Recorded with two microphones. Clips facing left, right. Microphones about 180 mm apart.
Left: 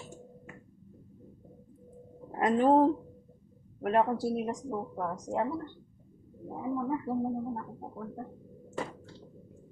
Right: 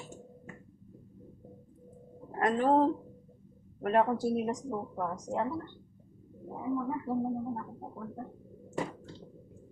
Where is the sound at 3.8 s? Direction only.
Centre (ahead or behind).